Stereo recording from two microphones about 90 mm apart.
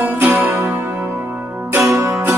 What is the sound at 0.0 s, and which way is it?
Music, 20° right (ahead or behind).